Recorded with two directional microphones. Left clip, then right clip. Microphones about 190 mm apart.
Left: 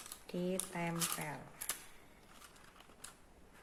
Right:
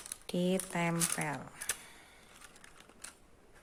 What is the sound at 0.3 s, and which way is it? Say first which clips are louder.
Speech: right 6 dB; 45° right (ahead or behind).